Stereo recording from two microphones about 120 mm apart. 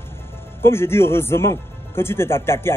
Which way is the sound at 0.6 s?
20° left (ahead or behind).